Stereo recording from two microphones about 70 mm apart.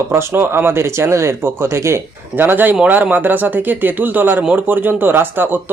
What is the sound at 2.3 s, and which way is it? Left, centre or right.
Speech, right.